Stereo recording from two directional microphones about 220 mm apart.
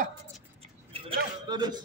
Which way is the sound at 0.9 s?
20° right (ahead or behind).